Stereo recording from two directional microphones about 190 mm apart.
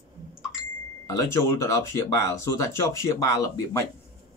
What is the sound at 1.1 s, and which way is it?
Speech, 15° left (ahead or behind).